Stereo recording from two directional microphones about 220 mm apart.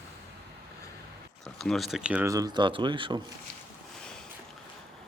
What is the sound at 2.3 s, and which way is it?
Speech, 15° right (ahead or behind).